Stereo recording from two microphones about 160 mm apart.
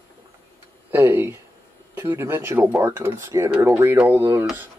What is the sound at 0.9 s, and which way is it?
Speech, 15° right (ahead or behind).